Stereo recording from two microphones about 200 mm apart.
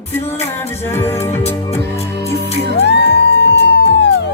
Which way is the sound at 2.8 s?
60° left (ahead or behind).